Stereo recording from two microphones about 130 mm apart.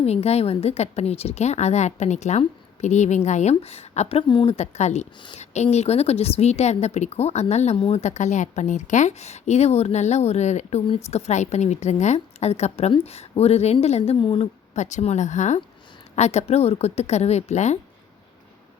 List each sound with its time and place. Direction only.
0.0 s speech: 55° left (ahead or behind)
4.2 s speech: 35° left (ahead or behind)
4.5 s speech: 60° left (ahead or behind)
14.2 s speech: 40° left (ahead or behind)
14.8 s speech: 65° left (ahead or behind)